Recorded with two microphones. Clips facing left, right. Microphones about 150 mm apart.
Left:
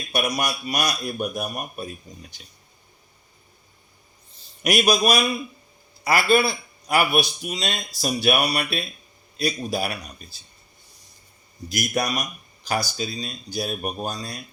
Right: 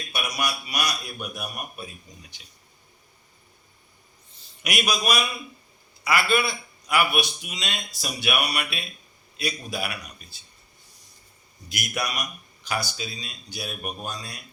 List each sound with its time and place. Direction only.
0.1 s a man's voice: 45° left (ahead or behind)
4.7 s speech: 35° left (ahead or behind)
11.7 s speech: 40° left (ahead or behind)